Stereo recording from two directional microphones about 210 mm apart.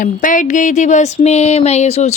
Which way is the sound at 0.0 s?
40° left (ahead or behind).